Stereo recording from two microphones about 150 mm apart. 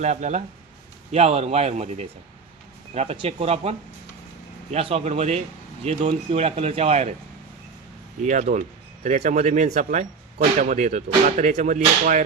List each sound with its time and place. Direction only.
0.0 s speech: 50° right (ahead or behind)
8.2 s speech: 55° right (ahead or behind)